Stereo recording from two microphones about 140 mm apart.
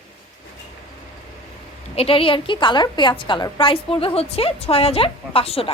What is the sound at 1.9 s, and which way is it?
A woman's voice, 45° left (ahead or behind).